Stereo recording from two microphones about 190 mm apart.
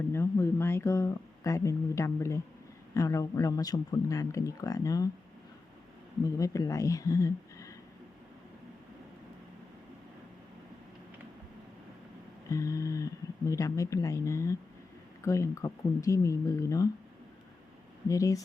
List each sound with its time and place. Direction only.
0.1 s speech: 15° left (ahead or behind)
6.2 s speech: 15° left (ahead or behind)
12.5 s speech: 15° left (ahead or behind)
18.1 s speech: 15° left (ahead or behind)